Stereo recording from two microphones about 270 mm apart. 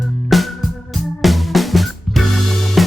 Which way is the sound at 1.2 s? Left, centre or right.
Centre.